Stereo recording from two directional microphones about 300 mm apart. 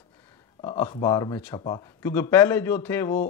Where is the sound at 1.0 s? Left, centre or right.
Centre.